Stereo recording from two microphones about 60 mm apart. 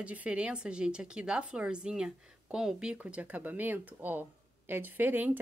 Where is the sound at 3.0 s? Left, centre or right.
Right.